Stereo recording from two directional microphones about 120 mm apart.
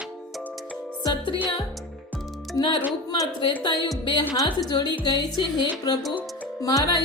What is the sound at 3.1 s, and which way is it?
Speech, 35° left (ahead or behind).